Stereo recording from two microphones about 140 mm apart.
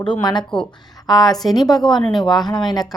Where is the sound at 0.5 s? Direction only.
5° left (ahead or behind).